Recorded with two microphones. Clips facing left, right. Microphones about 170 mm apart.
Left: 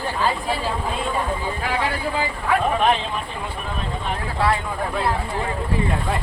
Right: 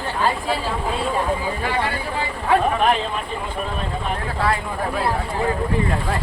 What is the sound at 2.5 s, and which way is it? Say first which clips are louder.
Speech: right 3 dB; 30° right (ahead or behind).